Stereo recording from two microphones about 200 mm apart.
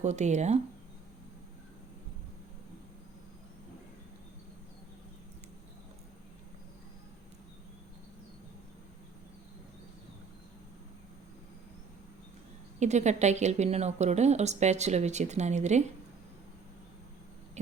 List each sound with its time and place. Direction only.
0.0 s speech: 35° right (ahead or behind)
12.8 s speech: 35° right (ahead or behind)